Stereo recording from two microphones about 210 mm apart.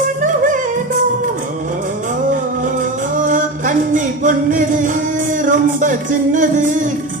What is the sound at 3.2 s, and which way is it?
Music, 40° right (ahead or behind).